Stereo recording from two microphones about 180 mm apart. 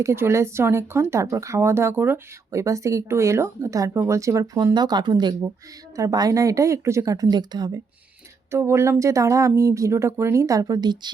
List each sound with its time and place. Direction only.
0.0 s speech: 15° right (ahead or behind)